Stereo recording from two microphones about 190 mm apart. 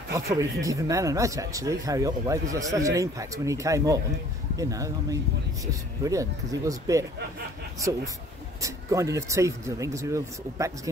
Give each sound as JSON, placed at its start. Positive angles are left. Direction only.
{"t": 0.1, "sound": "speech", "side_deg": -15}
{"t": 8.5, "sound": "speech", "side_deg": -15}